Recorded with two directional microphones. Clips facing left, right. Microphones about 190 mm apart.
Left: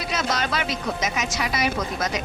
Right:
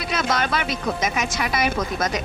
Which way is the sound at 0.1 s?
55° right (ahead or behind).